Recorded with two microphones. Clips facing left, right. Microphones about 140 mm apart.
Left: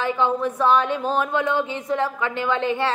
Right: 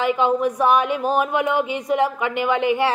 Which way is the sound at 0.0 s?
15° right (ahead or behind).